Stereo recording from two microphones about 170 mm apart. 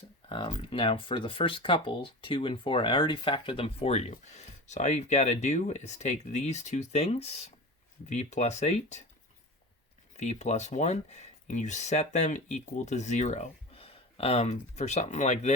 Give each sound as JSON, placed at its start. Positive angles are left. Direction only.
{"t": 0.3, "sound": "speech", "side_deg": 30}
{"t": 10.2, "sound": "speech", "side_deg": 40}